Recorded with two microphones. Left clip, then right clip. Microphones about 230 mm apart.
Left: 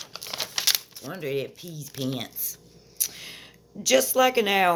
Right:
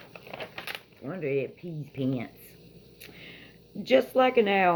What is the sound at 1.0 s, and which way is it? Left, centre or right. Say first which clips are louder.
Speech: even; left.